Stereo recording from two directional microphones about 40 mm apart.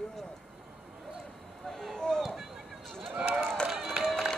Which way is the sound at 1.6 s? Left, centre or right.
Centre.